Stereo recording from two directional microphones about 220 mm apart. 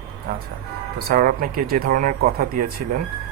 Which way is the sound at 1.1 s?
40° right (ahead or behind).